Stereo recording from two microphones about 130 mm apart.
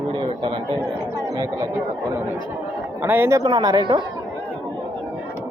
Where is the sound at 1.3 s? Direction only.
30° right (ahead or behind).